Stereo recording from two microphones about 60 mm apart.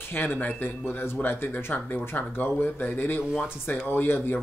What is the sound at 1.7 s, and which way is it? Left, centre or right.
Speech, left.